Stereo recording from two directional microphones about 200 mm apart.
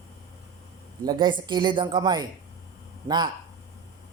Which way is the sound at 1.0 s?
20° right (ahead or behind).